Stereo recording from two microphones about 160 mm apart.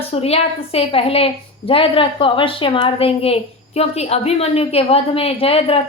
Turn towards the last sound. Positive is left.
turn(degrees=35)  # may be behind; listen again after turning